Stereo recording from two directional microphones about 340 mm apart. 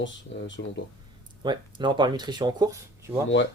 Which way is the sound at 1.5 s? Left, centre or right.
Centre.